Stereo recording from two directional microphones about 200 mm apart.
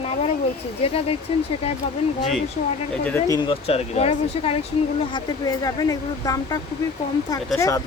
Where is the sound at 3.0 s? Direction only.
10° left (ahead or behind).